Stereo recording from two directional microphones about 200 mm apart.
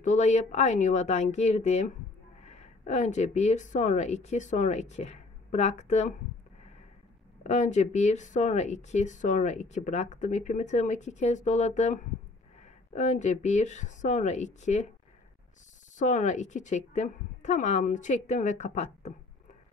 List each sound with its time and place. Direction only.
0.0 s speech: 35° left (ahead or behind)
7.4 s speech: 35° left (ahead or behind)
16.0 s speech: 40° left (ahead or behind)